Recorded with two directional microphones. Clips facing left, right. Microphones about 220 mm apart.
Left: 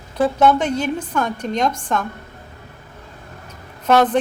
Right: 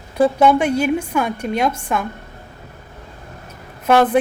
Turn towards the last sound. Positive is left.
turn(degrees=-10)  # may be behind; listen again after turning